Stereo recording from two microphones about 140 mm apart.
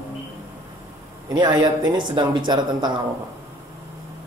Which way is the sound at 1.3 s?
30° right (ahead or behind).